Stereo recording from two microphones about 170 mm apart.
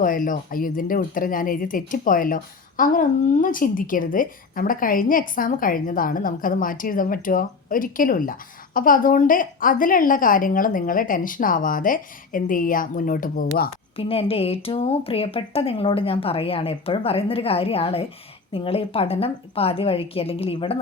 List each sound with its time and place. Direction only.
0.0 s speech: 50° left (ahead or behind)
13.9 s a woman's voice: 35° left (ahead or behind)